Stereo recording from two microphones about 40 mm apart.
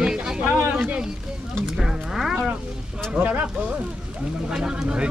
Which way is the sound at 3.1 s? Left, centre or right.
Right.